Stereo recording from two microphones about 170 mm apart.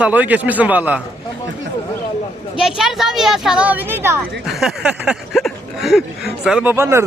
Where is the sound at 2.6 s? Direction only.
5° right (ahead or behind).